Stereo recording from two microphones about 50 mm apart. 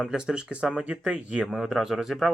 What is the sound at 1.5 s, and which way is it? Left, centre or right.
Speech, centre.